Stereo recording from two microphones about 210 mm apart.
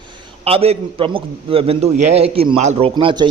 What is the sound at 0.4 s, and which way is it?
A man's voice, 30° right (ahead or behind).